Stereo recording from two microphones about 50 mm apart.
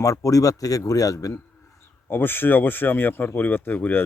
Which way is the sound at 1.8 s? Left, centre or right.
Left.